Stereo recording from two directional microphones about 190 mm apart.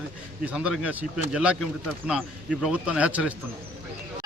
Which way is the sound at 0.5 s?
5° right (ahead or behind).